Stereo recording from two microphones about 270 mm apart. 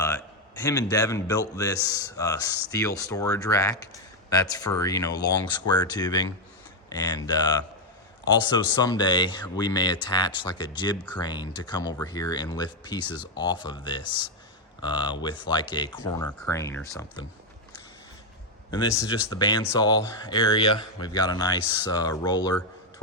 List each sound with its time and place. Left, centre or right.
0.6 s speech: centre
18.7 s speech: centre